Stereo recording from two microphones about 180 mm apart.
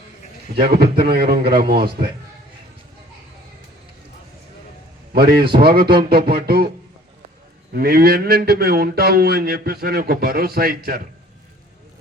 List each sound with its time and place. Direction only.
0.5 s a man's voice: 30° right (ahead or behind)
0.8 s a man's voice: 55° right (ahead or behind)
5.1 s a man's voice: 60° right (ahead or behind)
7.7 s a man's voice: 55° right (ahead or behind)